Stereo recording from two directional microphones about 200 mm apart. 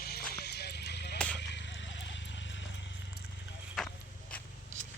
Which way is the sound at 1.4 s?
60° left (ahead or behind).